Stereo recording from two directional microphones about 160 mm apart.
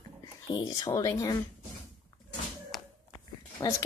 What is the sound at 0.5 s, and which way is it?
Speech, 25° left (ahead or behind).